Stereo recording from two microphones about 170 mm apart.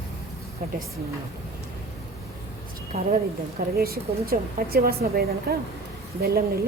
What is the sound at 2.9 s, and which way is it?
A woman's voice, 60° right (ahead or behind).